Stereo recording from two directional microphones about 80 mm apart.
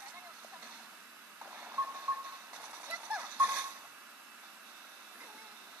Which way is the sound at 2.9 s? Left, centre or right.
Centre.